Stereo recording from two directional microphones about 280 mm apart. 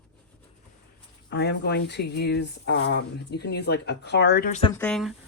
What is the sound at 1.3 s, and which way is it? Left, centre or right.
Speech, left.